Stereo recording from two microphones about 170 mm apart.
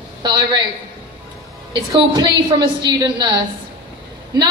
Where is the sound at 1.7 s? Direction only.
25° right (ahead or behind).